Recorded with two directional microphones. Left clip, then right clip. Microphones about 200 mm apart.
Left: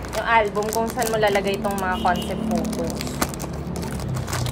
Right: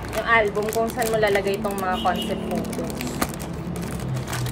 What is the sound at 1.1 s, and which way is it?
Speech, 20° left (ahead or behind).